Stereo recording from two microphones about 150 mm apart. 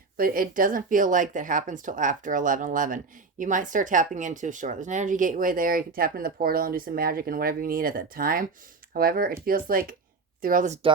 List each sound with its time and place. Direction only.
0.2 s speech: 70° right (ahead or behind)
10.4 s speech: 60° right (ahead or behind)